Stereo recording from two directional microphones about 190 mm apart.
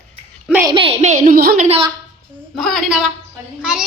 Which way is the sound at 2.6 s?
Centre (ahead or behind).